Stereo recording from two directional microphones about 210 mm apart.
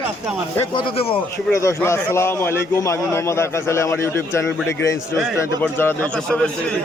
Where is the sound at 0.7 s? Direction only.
25° left (ahead or behind).